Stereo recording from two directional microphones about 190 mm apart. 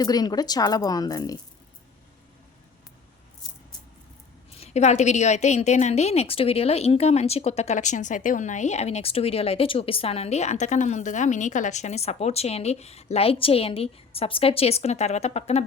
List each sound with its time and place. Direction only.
0.0 s a woman's voice: 20° left (ahead or behind)
4.6 s a woman's voice: 35° left (ahead or behind)